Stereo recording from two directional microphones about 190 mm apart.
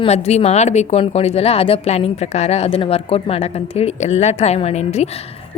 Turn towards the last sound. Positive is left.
turn(degrees=35)  # may be behind; listen again after turning